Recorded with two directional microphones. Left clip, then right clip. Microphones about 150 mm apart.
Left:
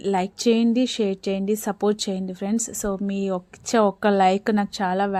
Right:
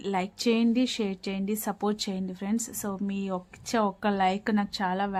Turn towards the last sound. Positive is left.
turn(degrees=35)  # may be behind; listen again after turning